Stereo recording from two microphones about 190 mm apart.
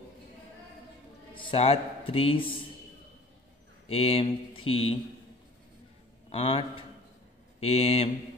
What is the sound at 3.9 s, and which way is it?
Speech, 30° left (ahead or behind).